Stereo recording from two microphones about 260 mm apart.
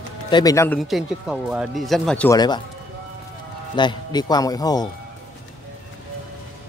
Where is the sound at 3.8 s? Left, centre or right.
Centre.